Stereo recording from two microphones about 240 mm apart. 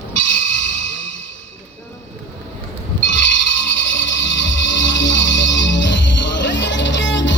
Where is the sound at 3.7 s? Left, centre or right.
Left.